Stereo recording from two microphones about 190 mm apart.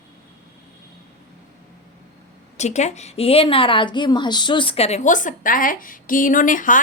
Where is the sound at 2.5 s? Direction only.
35° left (ahead or behind).